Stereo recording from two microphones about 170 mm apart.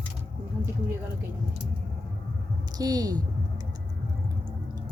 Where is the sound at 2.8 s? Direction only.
20° right (ahead or behind).